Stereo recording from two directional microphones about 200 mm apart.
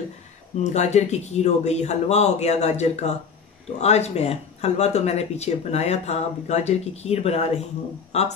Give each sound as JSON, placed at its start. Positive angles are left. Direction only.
{"t": 0.7, "sound": "speech", "side_deg": 35}